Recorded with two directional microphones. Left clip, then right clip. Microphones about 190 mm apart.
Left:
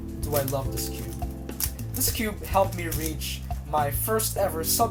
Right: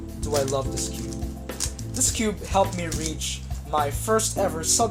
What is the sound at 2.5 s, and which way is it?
Speech, 45° right (ahead or behind).